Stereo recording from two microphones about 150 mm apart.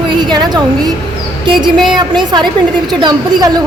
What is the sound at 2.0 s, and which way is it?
A woman's voice, 30° right (ahead or behind).